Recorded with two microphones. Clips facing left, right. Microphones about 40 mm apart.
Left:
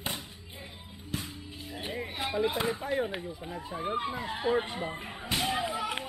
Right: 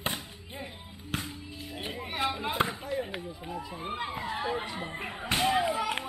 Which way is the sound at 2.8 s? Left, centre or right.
Left.